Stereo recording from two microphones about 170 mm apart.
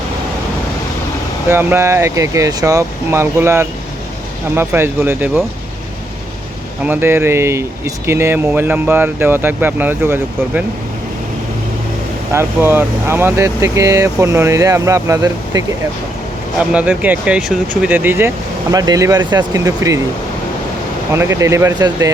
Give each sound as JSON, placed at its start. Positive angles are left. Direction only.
{"t": 1.5, "sound": "speech", "side_deg": -15}
{"t": 6.8, "sound": "speech", "side_deg": -10}
{"t": 12.3, "sound": "speech", "side_deg": -15}
{"t": 16.7, "sound": "speech", "side_deg": -5}
{"t": 21.1, "sound": "speech", "side_deg": -15}